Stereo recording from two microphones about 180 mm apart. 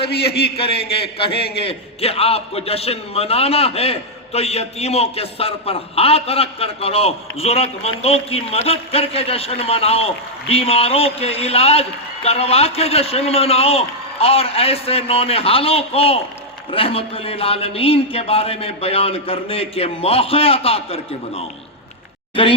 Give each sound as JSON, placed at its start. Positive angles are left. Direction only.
{"t": 0.5, "sound": "a man's voice", "side_deg": 30}